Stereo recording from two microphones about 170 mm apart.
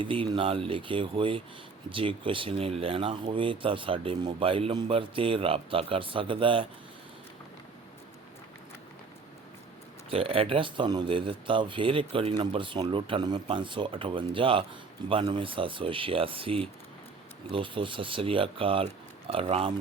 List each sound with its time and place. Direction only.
0.0 s speech: 30° right (ahead or behind)
10.1 s speech: 35° right (ahead or behind)